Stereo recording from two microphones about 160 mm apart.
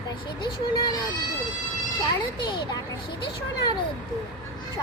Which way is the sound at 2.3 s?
30° left (ahead or behind).